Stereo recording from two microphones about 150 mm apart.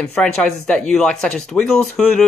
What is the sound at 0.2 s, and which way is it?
Speech, 5° left (ahead or behind).